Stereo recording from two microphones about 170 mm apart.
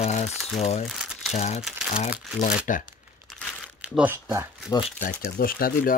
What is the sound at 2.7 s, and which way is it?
Speech, 50° left (ahead or behind).